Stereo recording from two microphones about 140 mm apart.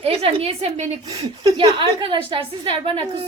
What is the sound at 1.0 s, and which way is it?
A woman's voice, 30° right (ahead or behind).